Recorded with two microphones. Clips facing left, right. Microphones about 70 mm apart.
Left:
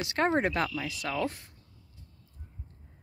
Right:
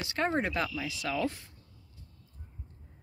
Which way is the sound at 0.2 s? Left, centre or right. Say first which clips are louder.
Left 3 dB; left.